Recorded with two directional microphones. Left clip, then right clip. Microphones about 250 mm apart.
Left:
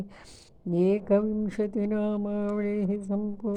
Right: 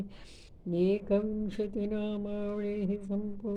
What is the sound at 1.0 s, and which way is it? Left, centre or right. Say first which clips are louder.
Speech: left 6 dB; left.